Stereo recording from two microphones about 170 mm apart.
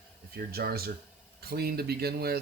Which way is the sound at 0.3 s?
65° right (ahead or behind).